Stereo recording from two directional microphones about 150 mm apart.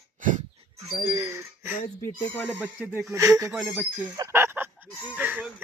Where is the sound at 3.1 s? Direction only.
20° right (ahead or behind).